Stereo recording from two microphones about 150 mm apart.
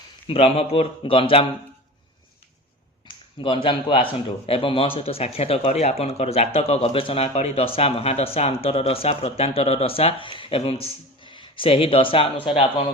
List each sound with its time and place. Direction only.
0.3 s speech: 40° left (ahead or behind)
3.4 s speech: 35° left (ahead or behind)